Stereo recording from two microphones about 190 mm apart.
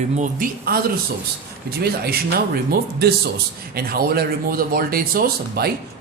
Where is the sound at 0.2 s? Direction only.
45° right (ahead or behind).